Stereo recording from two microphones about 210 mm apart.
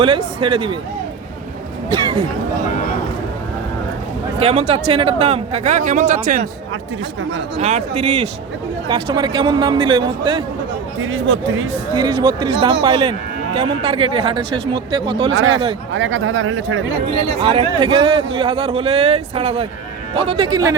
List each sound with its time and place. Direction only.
0.4 s a man's voice: 25° right (ahead or behind)
1.9 s a man's voice: 25° right (ahead or behind)
4.4 s a man's voice: 30° right (ahead or behind)
7.6 s a man's voice: 30° right (ahead or behind)
11.0 s speech: 70° right (ahead or behind)
11.9 s a man's voice: 20° right (ahead or behind)
15.3 s speech: 65° right (ahead or behind)
17.1 s a man's voice: 25° right (ahead or behind)